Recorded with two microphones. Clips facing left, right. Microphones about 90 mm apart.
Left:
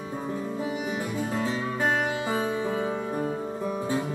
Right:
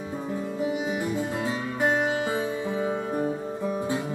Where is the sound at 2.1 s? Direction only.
25° right (ahead or behind).